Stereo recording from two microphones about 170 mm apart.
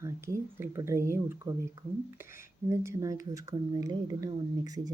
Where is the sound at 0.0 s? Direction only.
15° right (ahead or behind).